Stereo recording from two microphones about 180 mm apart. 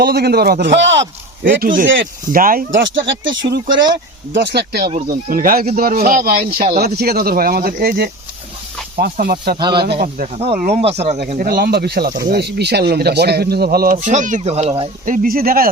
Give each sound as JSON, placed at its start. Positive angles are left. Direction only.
{"t": 0.0, "sound": "speech", "side_deg": -60}
{"t": 1.5, "sound": "speech", "side_deg": -50}
{"t": 2.7, "sound": "speech", "side_deg": -90}
{"t": 3.7, "sound": "speech", "side_deg": -25}
{"t": 4.4, "sound": "speech", "side_deg": -60}
{"t": 5.0, "sound": "speech", "side_deg": -50}
{"t": 9.6, "sound": "speech", "side_deg": -25}
{"t": 10.0, "sound": "speech", "side_deg": -50}
{"t": 10.4, "sound": "speech", "side_deg": -35}
{"t": 11.2, "sound": "speech", "side_deg": -55}